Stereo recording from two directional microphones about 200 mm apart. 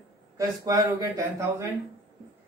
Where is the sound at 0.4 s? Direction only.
15° right (ahead or behind).